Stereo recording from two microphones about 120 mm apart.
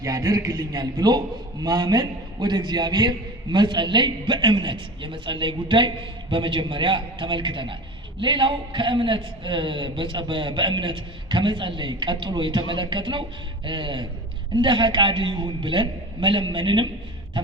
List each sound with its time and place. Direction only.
0.0 s a man's voice: 30° right (ahead or behind)